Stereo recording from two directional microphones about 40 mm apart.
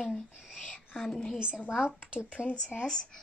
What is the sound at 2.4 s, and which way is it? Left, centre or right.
Speech, left.